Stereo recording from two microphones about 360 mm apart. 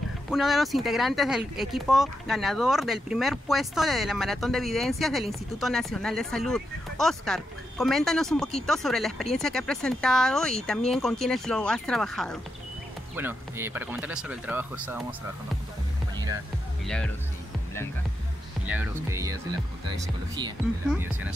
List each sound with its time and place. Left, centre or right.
0.3 s speech: centre
16.8 s speech: centre
18.7 s speech: centre